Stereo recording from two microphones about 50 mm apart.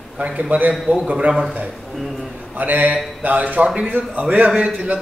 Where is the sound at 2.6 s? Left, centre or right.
Right.